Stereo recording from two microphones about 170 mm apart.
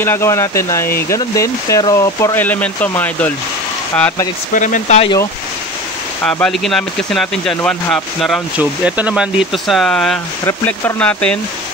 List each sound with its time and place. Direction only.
0.0 s speech: 15° left (ahead or behind)
4.6 s speech: 50° left (ahead or behind)
6.2 s speech: 5° left (ahead or behind)
8.5 s speech: 10° right (ahead or behind)